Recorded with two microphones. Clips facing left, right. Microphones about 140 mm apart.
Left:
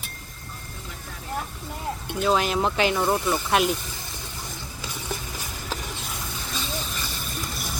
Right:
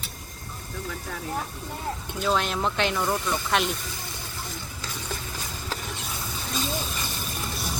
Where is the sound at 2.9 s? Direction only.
20° left (ahead or behind).